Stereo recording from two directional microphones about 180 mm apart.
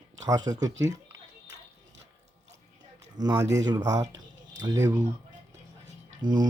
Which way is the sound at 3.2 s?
20° right (ahead or behind).